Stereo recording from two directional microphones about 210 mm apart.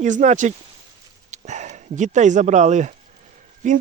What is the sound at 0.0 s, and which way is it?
Speech, 35° right (ahead or behind).